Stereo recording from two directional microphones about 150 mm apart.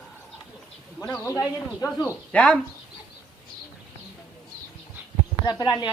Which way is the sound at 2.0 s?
10° left (ahead or behind).